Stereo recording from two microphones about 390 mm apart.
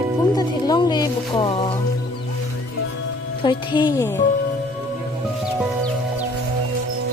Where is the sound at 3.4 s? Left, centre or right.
Centre.